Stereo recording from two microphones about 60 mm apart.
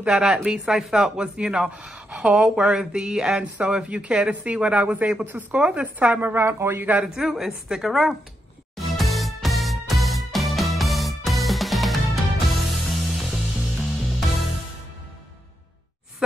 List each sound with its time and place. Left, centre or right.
0.0 s a man's voice: centre; by 6.9 s right
7.2 s a woman's voice: centre
8.7 s music: centre